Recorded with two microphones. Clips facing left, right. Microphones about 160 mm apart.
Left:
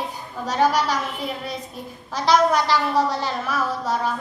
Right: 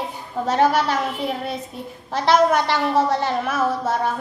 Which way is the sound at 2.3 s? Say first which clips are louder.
Right 1 dB; 55° right (ahead or behind).